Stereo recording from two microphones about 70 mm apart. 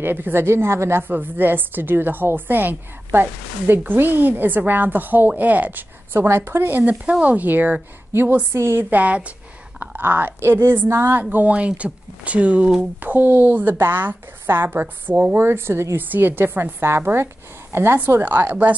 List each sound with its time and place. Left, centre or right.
0.0 s a woman's voice: right
11.3 s a woman's voice: centre